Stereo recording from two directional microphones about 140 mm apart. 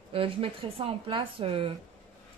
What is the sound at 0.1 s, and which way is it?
Speech, 40° right (ahead or behind).